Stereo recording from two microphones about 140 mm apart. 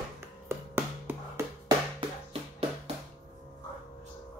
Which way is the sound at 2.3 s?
45° right (ahead or behind).